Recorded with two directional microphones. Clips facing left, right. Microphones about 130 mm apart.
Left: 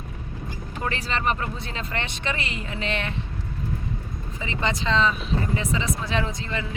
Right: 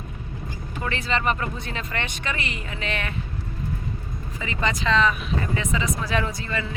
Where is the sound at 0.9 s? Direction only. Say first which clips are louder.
Right 1 dB; 35° left (ahead or behind).